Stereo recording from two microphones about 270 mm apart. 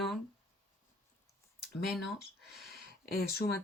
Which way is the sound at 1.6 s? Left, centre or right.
Centre.